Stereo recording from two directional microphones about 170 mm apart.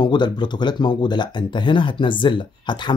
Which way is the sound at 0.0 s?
25° left (ahead or behind).